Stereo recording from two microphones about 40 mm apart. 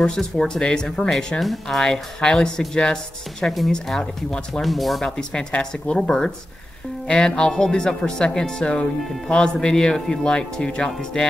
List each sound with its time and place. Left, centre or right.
0.0 s speech: centre
1.4 s speech: centre
1.8 s speech: centre
4.6 s speech: centre
5.0 s speech: centre
5.5 s speech: left
5.9 s speech: centre